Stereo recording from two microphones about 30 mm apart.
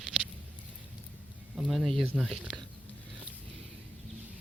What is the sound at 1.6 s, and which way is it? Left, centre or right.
Speech, centre.